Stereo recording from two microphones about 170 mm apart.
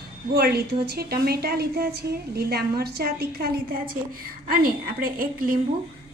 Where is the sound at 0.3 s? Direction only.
65° right (ahead or behind).